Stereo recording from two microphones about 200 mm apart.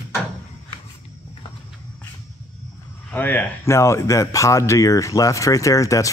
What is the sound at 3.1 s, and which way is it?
Speech, 10° left (ahead or behind).